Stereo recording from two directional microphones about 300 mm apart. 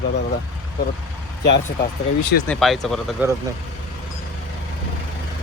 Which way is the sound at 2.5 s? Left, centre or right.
Centre.